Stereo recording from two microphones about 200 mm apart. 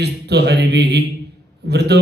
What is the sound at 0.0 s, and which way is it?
Mantra, 55° right (ahead or behind).